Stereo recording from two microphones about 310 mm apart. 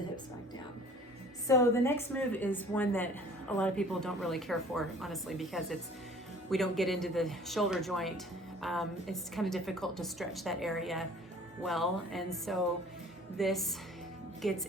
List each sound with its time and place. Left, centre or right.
1.5 s a woman's voice: centre